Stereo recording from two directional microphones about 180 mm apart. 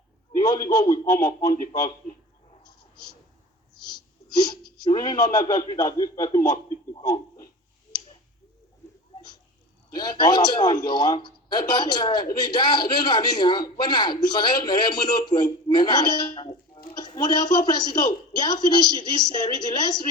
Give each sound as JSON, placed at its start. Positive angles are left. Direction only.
{"t": 0.3, "sound": "a man's voice", "side_deg": 20}
{"t": 3.9, "sound": "a sound", "side_deg": 25}
{"t": 4.8, "sound": "a man's voice", "side_deg": 25}
{"t": 9.9, "sound": "a man's voice", "side_deg": 25}